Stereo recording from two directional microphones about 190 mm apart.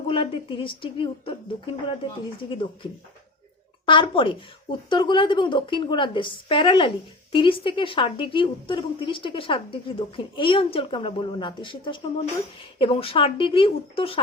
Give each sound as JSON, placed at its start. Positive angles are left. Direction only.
{"t": 0.1, "sound": "a woman's voice", "side_deg": 25}
{"t": 3.8, "sound": "a woman's voice", "side_deg": 25}